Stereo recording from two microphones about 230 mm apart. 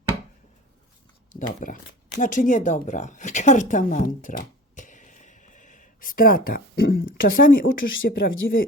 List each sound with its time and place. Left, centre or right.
1.4 s speech: left